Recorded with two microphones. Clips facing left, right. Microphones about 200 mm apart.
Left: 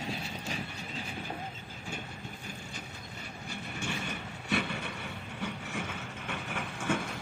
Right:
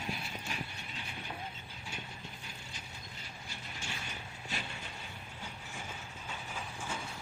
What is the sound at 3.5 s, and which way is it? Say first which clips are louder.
Vehicle: left 9 dB; 65° left (ahead or behind).